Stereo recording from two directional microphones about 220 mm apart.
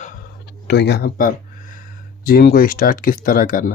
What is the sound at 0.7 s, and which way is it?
Speech, 50° left (ahead or behind).